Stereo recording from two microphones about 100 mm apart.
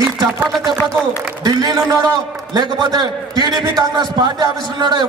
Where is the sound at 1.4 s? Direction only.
40° right (ahead or behind).